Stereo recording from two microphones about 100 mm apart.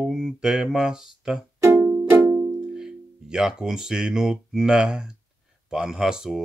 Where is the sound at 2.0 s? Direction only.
25° right (ahead or behind).